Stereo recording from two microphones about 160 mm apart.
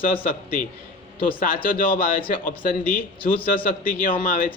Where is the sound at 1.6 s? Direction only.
60° left (ahead or behind).